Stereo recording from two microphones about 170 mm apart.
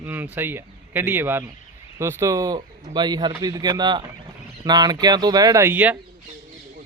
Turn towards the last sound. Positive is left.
turn(degrees=-10)  # may be behind; listen again after turning